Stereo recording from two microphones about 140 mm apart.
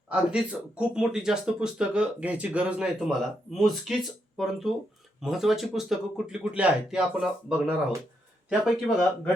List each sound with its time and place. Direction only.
0.1 s speech: 5° right (ahead or behind)